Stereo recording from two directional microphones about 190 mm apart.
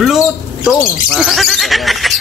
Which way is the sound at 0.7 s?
Centre (ahead or behind).